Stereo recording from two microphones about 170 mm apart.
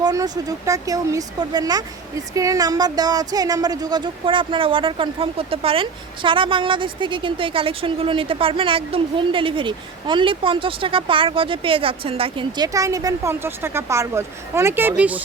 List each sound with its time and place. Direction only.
0.0 s speech: 20° right (ahead or behind)